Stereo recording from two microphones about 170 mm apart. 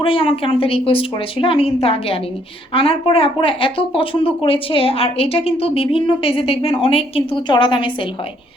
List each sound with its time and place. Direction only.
0.0 s speech: 30° left (ahead or behind)